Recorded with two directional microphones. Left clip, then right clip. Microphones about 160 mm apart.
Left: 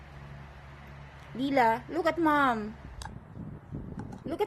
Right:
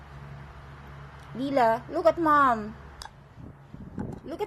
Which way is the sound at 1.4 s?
15° left (ahead or behind).